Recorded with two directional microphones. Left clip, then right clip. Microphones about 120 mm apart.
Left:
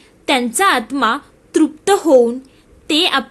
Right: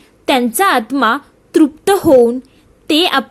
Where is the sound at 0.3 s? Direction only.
35° right (ahead or behind).